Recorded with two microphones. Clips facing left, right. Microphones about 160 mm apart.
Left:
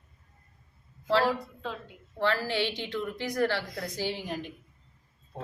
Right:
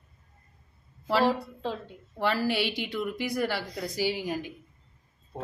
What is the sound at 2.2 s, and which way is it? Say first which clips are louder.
Speech: right 1 dB; 10° right (ahead or behind).